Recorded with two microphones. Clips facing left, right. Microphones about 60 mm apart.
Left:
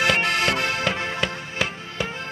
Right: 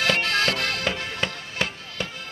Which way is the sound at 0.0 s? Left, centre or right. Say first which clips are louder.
Left 2 dB; left.